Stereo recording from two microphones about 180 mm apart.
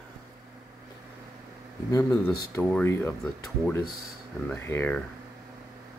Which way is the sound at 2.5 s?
10° left (ahead or behind).